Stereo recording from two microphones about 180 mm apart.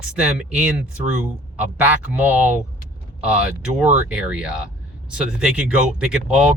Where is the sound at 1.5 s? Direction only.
10° right (ahead or behind).